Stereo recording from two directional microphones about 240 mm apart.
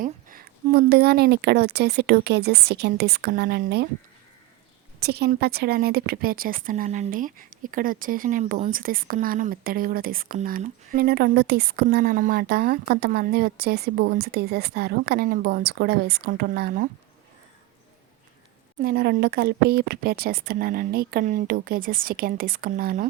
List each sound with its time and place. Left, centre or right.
0.0 s a woman's voice: right
4.9 s a woman's voice: right
18.8 s a woman's voice: right